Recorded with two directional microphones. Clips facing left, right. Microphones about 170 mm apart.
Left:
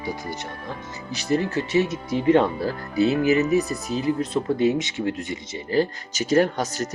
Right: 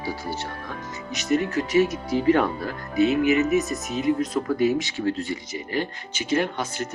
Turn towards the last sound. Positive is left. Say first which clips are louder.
# left 5 dB
turn(degrees=40)  # may be behind; listen again after turning